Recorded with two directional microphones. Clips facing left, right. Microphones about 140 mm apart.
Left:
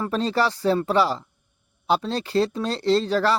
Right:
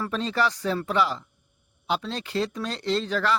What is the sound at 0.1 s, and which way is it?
Speech, 35° left (ahead or behind).